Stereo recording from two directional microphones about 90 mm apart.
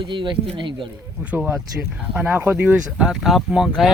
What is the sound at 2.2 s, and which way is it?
Speech, 20° right (ahead or behind).